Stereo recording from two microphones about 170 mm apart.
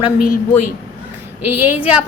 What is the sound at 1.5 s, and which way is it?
Speech, 10° right (ahead or behind).